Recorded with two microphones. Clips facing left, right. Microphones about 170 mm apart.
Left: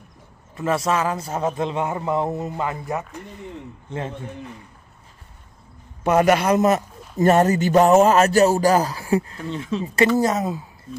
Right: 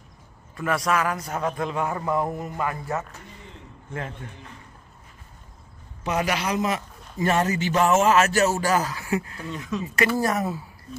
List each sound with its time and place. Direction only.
0.6 s a man's voice: 25° left (ahead or behind)
6.0 s a man's voice: 50° left (ahead or behind); by 10.6 s 20° left (ahead or behind)